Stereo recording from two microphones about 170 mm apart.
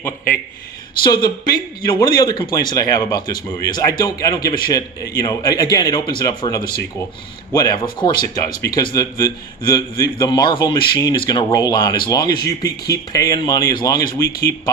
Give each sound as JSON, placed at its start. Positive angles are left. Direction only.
{"t": 1.0, "sound": "a man's voice", "side_deg": 25}